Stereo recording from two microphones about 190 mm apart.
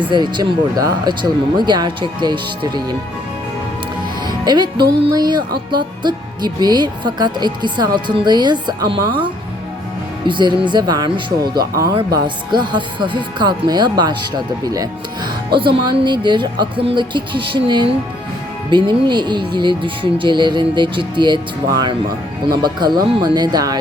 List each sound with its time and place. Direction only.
0.1 s speech: 25° right (ahead or behind)
4.3 s speech: 25° right (ahead or behind)
11.5 s speech: 55° right (ahead or behind)
11.9 s speech: 25° right (ahead or behind)